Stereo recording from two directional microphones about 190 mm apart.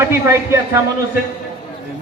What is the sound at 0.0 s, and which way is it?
Speech, 15° right (ahead or behind).